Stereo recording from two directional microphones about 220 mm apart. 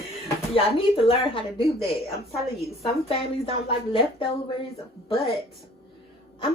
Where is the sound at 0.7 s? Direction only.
25° left (ahead or behind).